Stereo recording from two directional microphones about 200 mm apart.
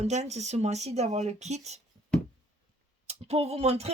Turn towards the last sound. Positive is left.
turn(degrees=-30)  # may be behind; listen again after turning